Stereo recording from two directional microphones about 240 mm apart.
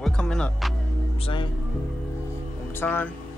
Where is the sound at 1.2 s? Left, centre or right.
Centre.